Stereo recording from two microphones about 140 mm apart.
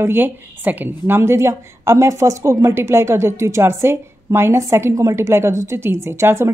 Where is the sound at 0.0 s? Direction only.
15° right (ahead or behind).